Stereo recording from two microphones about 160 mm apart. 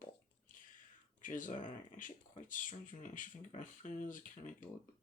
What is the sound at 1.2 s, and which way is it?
Speech, 55° left (ahead or behind).